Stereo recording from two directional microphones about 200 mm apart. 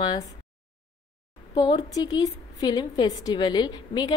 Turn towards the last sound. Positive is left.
turn(degrees=20)  # may be behind; listen again after turning